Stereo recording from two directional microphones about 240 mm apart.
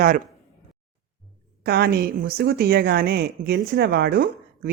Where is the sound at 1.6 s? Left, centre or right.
Right.